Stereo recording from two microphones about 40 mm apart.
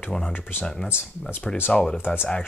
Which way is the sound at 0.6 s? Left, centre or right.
Centre.